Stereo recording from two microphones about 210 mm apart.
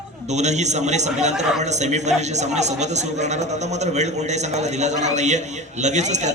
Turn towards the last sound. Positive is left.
turn(degrees=-35)  # may be behind; listen again after turning